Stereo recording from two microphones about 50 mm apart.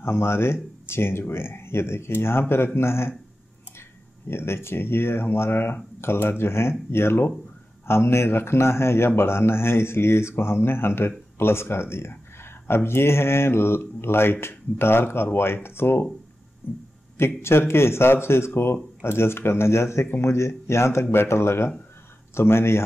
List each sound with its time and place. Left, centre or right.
0.0 s speech: left
4.3 s speech: left
17.4 s speech: left
21.0 s speech: left